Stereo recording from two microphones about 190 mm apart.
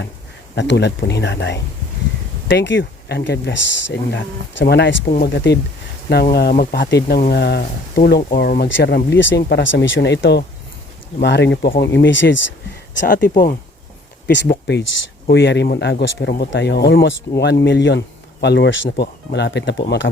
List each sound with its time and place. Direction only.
0.5 s speech: 65° left (ahead or behind); by 6.8 s 50° left (ahead or behind)
6.8 s speech: 60° left (ahead or behind)
13.1 s speech: 45° left (ahead or behind)
14.4 s speech: 55° left (ahead or behind)
15.3 s speech: 65° left (ahead or behind)